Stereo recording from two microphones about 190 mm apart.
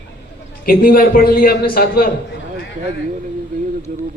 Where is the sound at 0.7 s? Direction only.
50° left (ahead or behind).